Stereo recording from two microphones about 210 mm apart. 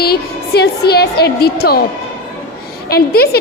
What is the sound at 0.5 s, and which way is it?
A woman's voice, 50° left (ahead or behind).